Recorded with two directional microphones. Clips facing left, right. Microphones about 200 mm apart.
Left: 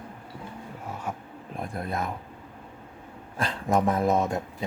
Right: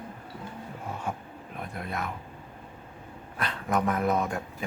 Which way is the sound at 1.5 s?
35° left (ahead or behind).